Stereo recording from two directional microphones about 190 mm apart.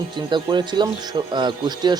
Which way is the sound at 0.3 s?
25° right (ahead or behind).